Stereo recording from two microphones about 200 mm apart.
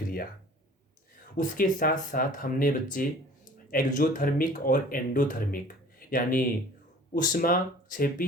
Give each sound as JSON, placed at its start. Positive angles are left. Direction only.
{"t": 1.4, "sound": "speech", "side_deg": 40}